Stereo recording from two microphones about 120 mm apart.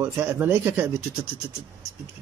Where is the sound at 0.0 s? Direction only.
15° right (ahead or behind).